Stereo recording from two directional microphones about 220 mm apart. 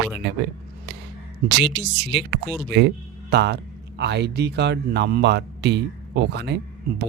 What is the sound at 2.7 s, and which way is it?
Speech, 50° right (ahead or behind).